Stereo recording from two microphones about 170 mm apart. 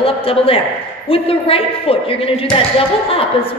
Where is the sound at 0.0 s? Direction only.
35° left (ahead or behind).